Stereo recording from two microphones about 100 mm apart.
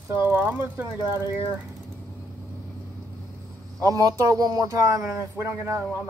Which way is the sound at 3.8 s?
35° right (ahead or behind).